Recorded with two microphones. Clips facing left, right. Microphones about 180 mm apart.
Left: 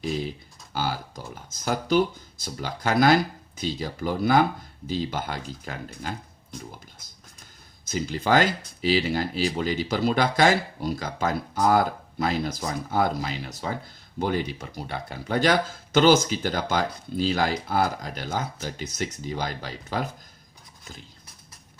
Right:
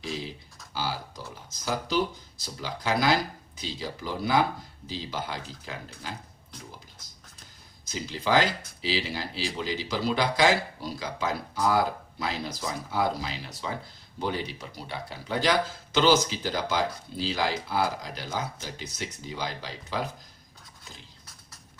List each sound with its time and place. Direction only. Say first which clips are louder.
0.7 s speech: left 4 dB; 50° left (ahead or behind)
7.9 s speech: left 4 dB; 50° left (ahead or behind)